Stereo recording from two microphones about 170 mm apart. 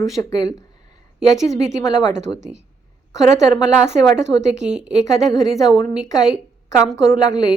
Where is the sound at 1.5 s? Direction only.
40° right (ahead or behind).